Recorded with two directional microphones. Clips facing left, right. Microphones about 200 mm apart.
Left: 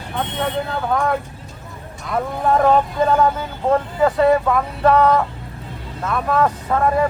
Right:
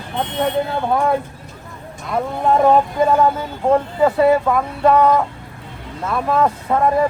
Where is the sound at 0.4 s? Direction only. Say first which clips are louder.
Right 4 dB; 25° right (ahead or behind).